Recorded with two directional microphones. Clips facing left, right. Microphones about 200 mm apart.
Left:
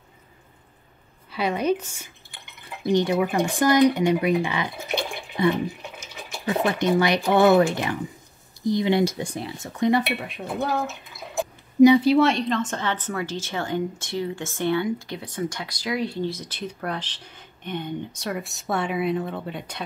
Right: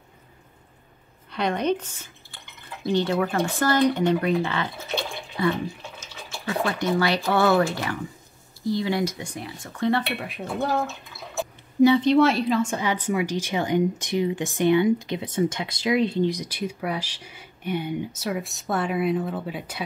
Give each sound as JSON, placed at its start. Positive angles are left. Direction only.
{"t": 1.3, "sound": "speech", "side_deg": 5}
{"t": 10.1, "sound": "speech", "side_deg": 0}
{"t": 11.3, "sound": "speech", "side_deg": 15}